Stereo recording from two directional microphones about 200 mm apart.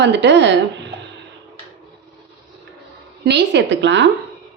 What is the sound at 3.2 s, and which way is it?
Speech, 60° right (ahead or behind).